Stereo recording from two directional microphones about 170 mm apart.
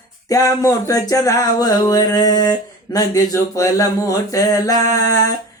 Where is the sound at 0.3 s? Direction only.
20° left (ahead or behind).